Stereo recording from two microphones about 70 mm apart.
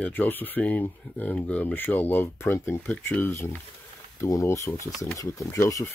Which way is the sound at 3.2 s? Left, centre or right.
Left.